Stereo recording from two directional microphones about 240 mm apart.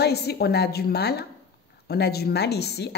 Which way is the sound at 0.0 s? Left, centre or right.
Left.